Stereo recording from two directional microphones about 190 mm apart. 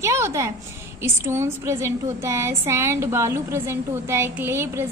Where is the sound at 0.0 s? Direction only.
15° right (ahead or behind).